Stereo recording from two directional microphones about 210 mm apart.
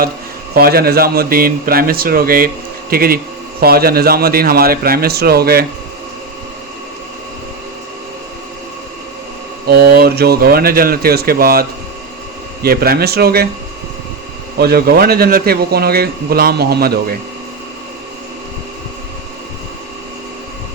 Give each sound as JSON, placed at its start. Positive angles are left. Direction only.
{"t": 0.5, "sound": "a man's voice", "side_deg": -45}
{"t": 9.6, "sound": "a man's voice", "side_deg": -50}
{"t": 12.6, "sound": "a man's voice", "side_deg": -45}
{"t": 14.6, "sound": "a man's voice", "side_deg": -45}